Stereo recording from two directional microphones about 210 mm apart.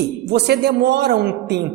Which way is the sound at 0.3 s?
55° right (ahead or behind).